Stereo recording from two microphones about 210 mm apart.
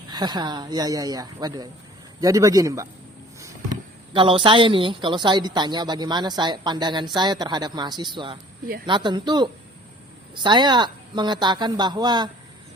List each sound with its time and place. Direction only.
0.1 s a woman's voice: 20° right (ahead or behind)
4.1 s a woman's voice: 25° right (ahead or behind)